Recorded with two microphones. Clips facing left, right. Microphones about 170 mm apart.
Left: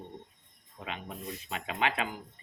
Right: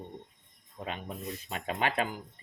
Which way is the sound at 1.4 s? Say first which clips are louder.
Even; 45° right (ahead or behind).